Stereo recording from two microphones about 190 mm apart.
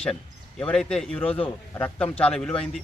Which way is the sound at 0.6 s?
5° left (ahead or behind).